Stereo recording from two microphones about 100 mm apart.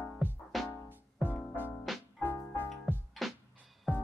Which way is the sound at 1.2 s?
20° left (ahead or behind).